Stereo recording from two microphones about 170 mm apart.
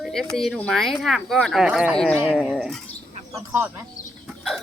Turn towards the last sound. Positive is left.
turn(degrees=0)  # may be behind; listen again after turning